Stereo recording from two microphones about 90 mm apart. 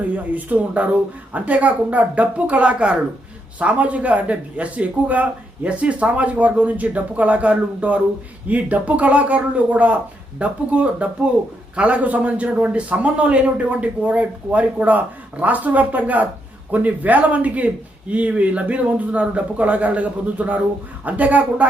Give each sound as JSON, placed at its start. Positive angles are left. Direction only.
{"t": 0.3, "sound": "a man's voice", "side_deg": -15}